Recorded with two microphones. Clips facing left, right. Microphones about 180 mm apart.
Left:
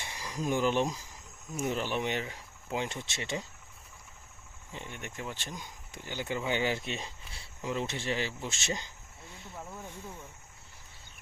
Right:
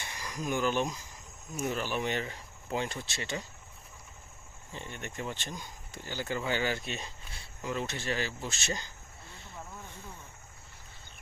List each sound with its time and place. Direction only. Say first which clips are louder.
0.3 s speech: left 2 dB; 30° left (ahead or behind)
4.7 s speech: right 1 dB; 15° left (ahead or behind)